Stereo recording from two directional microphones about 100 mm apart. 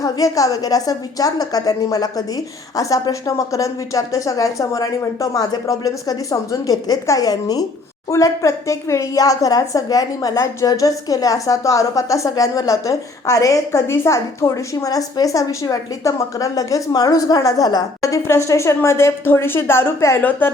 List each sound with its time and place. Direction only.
0.0 s a woman's voice: 35° left (ahead or behind); by 20.6 s 20° left (ahead or behind)